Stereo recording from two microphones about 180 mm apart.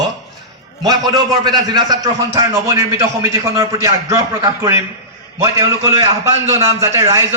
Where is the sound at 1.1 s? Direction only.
20° right (ahead or behind).